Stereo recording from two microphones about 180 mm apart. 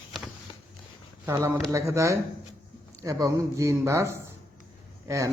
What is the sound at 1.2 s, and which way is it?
A man's voice, 15° right (ahead or behind).